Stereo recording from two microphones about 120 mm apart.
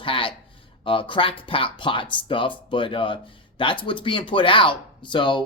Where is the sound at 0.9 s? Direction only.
45° left (ahead or behind).